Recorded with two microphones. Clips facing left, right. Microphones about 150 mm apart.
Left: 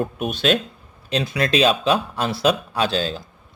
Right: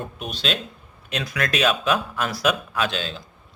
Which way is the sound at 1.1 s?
30° left (ahead or behind).